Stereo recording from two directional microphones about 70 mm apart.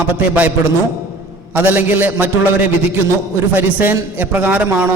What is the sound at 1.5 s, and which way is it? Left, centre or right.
Speech, right.